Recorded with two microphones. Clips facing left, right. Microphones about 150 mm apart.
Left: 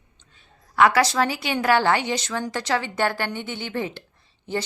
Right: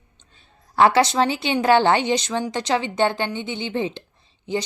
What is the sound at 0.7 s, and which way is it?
A woman's voice, 30° right (ahead or behind).